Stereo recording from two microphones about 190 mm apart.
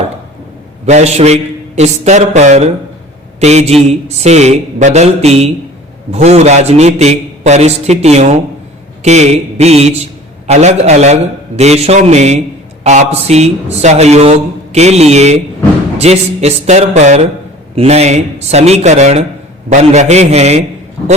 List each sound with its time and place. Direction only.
0.9 s a man's voice: 35° right (ahead or behind)